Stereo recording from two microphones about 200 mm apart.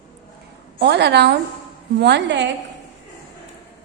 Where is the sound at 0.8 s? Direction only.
55° right (ahead or behind).